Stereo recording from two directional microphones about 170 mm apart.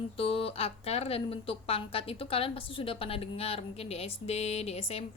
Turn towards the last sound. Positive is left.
turn(degrees=35)  # may be behind; listen again after turning